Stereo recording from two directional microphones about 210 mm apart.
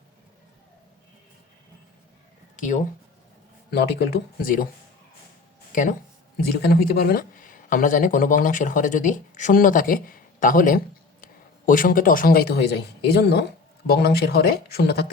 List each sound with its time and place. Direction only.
2.6 s speech: 35° left (ahead or behind)
3.7 s speech: 50° left (ahead or behind)
5.7 s speech: 40° left (ahead or behind)
6.6 s a man's voice: 50° left (ahead or behind)